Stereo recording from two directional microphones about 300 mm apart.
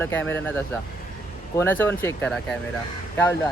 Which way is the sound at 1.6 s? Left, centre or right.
Centre.